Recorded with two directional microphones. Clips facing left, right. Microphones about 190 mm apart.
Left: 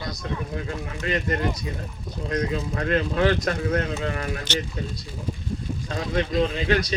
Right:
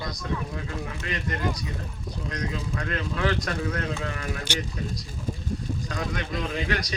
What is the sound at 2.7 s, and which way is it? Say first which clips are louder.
Speech: left 10 dB; 25° left (ahead or behind).